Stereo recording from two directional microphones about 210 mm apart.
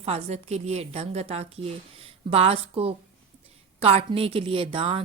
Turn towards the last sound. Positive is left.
turn(degrees=-25)  # may be behind; listen again after turning